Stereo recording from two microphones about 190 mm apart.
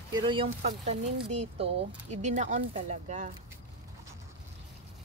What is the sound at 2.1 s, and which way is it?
Speech, 40° right (ahead or behind).